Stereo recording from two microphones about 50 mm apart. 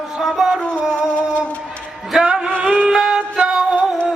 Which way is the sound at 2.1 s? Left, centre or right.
Centre.